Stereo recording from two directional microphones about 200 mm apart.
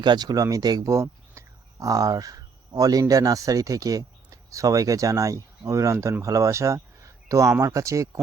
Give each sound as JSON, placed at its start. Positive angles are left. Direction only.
{"t": 0.0, "sound": "speech", "side_deg": -20}